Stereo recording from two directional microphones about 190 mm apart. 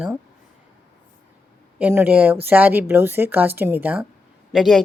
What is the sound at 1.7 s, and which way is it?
Speech, 10° right (ahead or behind).